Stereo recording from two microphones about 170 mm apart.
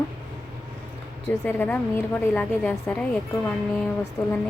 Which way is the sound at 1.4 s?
10° left (ahead or behind).